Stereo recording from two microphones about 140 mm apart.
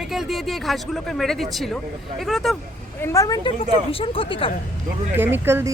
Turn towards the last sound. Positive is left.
turn(degrees=-15)  # may be behind; listen again after turning